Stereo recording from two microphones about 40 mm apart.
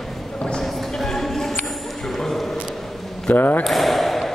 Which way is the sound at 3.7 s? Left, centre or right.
Centre.